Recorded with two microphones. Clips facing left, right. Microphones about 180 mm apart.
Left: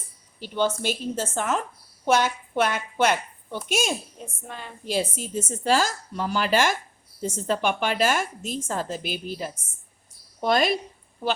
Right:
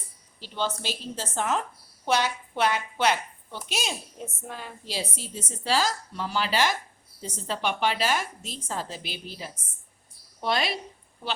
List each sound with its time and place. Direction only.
0.3 s a woman's voice: 55° left (ahead or behind)
4.4 s a woman's voice: 5° right (ahead or behind)
4.9 s a woman's voice: 50° left (ahead or behind)